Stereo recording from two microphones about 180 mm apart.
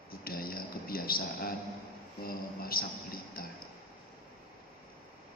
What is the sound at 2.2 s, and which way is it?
A man's voice, 55° left (ahead or behind).